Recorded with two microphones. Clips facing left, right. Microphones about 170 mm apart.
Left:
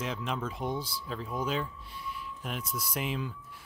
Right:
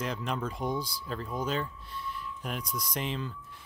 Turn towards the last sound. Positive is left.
turn(degrees=5)  # may be behind; listen again after turning